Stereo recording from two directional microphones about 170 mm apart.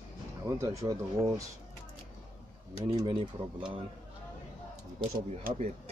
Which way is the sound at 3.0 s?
25° right (ahead or behind).